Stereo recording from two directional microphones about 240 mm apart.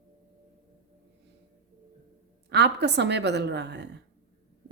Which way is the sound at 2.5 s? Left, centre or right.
Right.